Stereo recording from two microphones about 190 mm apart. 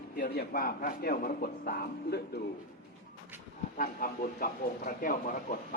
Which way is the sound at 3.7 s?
45° left (ahead or behind).